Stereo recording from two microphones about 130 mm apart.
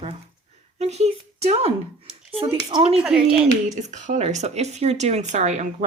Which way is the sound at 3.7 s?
65° right (ahead or behind).